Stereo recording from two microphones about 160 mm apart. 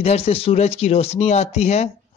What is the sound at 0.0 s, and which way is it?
Speech, 40° left (ahead or behind).